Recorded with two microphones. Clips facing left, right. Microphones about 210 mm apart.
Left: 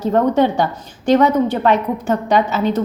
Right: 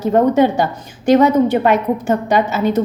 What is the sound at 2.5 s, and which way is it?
Speech, 45° right (ahead or behind).